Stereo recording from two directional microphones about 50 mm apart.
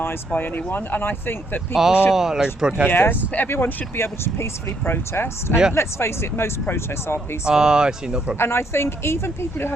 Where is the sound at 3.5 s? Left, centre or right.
Left.